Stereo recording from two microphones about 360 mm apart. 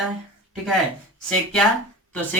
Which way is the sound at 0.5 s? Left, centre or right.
Centre.